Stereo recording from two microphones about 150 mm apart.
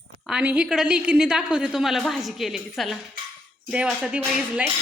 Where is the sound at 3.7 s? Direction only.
5° right (ahead or behind).